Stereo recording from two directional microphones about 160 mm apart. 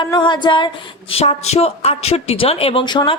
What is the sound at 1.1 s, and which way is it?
A woman's voice, 40° left (ahead or behind).